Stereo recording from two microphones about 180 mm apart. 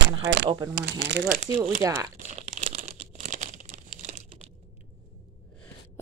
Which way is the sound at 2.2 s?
40° right (ahead or behind).